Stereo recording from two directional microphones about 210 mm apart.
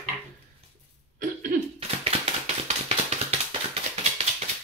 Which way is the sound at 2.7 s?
30° right (ahead or behind).